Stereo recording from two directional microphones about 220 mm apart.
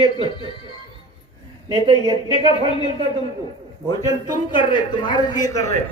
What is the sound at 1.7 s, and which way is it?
A man's voice, 20° left (ahead or behind).